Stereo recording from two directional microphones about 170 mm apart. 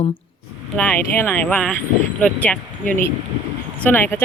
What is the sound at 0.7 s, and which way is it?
Speech, 10° left (ahead or behind).